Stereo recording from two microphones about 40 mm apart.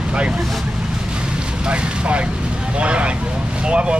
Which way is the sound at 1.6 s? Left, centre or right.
Right.